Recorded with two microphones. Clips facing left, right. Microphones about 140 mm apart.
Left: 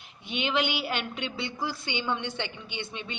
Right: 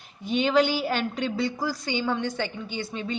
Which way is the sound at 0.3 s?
40° right (ahead or behind).